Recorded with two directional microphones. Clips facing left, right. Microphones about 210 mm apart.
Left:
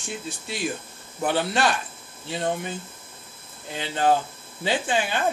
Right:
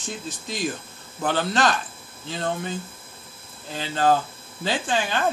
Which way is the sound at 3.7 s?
15° left (ahead or behind).